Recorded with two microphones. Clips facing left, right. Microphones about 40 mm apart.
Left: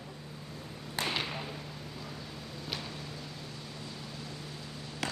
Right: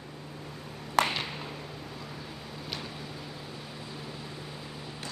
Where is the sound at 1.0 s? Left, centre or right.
Right.